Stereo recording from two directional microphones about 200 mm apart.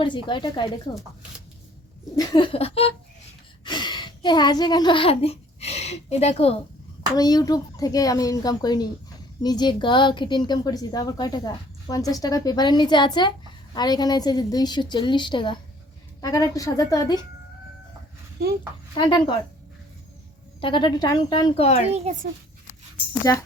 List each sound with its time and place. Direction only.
0.0 s a woman's voice: 25° left (ahead or behind)
2.1 s a woman's voice: 25° left (ahead or behind)
7.2 s a woman's voice: 20° left (ahead or behind)
18.9 s a woman's voice: 25° left (ahead or behind)
20.6 s a woman's voice: 25° left (ahead or behind)
21.8 s a child's voice: 35° right (ahead or behind)
23.3 s a woman's voice: 15° left (ahead or behind)